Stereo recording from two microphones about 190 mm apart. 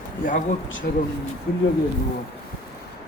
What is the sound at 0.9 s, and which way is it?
Speech, 55° left (ahead or behind).